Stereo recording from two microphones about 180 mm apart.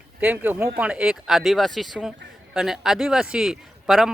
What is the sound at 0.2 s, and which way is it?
Speech, 10° right (ahead or behind).